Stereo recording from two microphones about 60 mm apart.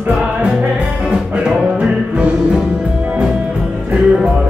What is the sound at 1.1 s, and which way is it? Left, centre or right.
Music, centre.